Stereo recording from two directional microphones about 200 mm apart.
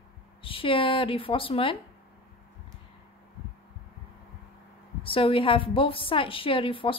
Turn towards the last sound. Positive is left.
turn(degrees=25)  # may be behind; listen again after turning